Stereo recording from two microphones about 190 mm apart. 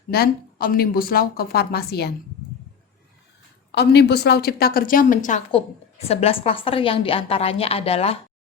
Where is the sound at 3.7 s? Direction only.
60° left (ahead or behind); by 5.4 s 45° left (ahead or behind).